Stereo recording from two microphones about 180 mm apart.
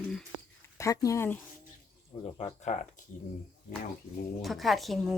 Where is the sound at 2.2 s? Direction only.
35° left (ahead or behind).